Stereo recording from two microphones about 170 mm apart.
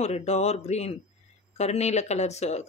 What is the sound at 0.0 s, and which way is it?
Speech, 40° left (ahead or behind).